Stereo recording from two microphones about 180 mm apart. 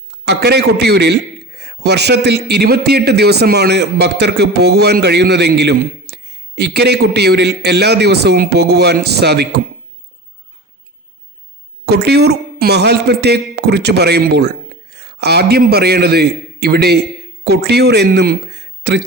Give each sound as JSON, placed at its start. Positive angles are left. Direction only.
{"t": 0.3, "sound": "a man's voice", "side_deg": -65}
{"t": 11.9, "sound": "a man's voice", "side_deg": -65}